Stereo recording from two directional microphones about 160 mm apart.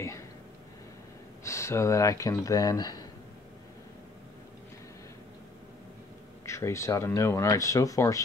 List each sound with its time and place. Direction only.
1.4 s speech: 15° left (ahead or behind)
6.4 s speech: 20° left (ahead or behind)